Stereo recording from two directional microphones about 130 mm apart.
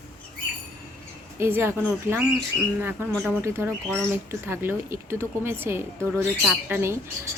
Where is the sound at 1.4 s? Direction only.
20° right (ahead or behind).